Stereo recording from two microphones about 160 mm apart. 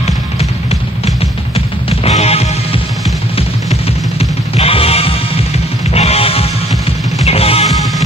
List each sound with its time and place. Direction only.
0.0 s music: 40° left (ahead or behind)
4.2 s music: 40° left (ahead or behind)